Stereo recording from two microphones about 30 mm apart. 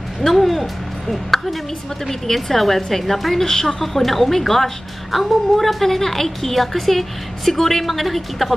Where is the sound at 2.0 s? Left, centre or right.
Centre.